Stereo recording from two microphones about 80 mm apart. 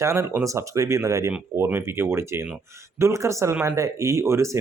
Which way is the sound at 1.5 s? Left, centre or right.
Right.